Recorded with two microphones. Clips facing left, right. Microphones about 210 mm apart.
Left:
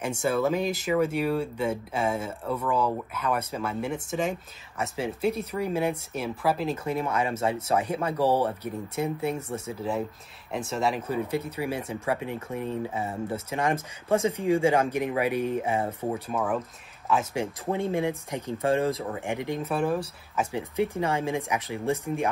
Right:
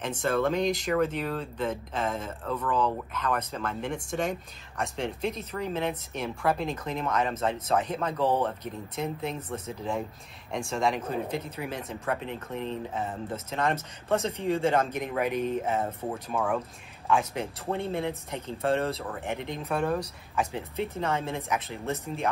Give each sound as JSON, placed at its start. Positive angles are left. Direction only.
{"t": 0.0, "sound": "speech", "side_deg": 10}
{"t": 20.5, "sound": "speech", "side_deg": 15}